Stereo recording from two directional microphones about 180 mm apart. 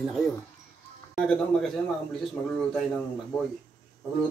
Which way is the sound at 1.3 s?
Centre (ahead or behind).